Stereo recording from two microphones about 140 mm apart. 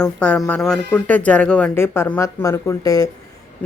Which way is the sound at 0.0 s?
5° left (ahead or behind).